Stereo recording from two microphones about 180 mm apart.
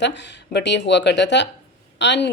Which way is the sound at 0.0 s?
75° left (ahead or behind).